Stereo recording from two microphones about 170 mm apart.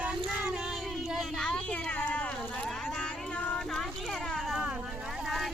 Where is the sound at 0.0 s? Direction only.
5° right (ahead or behind).